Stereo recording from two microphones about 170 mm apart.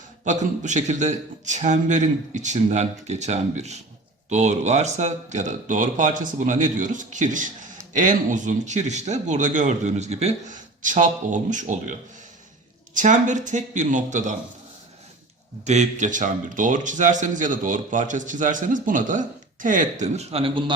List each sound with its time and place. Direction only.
0.3 s speech: 45° right (ahead or behind)
15.6 s speech: 40° right (ahead or behind)